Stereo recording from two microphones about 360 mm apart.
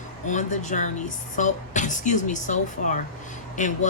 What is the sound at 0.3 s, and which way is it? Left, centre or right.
Speech, centre.